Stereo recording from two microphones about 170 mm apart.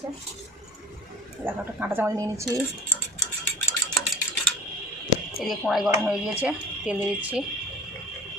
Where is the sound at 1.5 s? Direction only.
10° right (ahead or behind).